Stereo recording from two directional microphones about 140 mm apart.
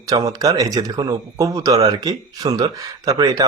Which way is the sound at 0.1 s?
25° right (ahead or behind).